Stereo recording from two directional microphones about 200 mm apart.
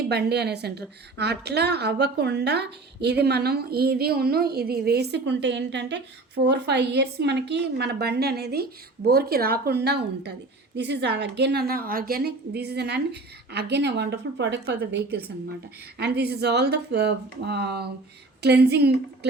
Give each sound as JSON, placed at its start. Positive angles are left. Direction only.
{"t": 0.1, "sound": "a woman's voice", "side_deg": -55}